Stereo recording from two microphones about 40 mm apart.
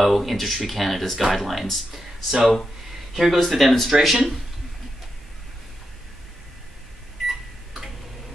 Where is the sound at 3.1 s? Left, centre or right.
Centre.